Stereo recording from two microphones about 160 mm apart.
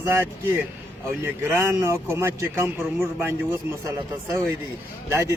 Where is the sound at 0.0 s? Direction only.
15° right (ahead or behind).